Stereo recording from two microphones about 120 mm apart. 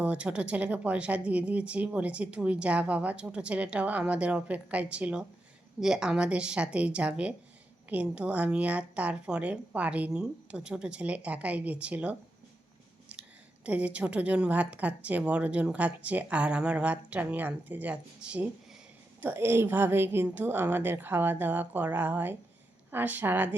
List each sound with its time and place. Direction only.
0.0 s a woman's voice: 10° right (ahead or behind)
13.7 s a woman's voice: 10° right (ahead or behind)
19.2 s a woman's voice: 20° right (ahead or behind)